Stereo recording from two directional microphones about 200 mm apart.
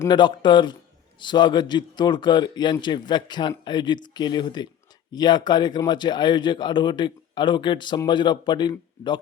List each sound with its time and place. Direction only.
0.0 s a man's voice: 25° left (ahead or behind)